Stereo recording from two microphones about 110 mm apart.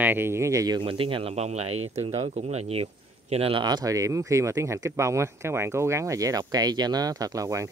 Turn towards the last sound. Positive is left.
turn(degrees=-30)  # may be behind; listen again after turning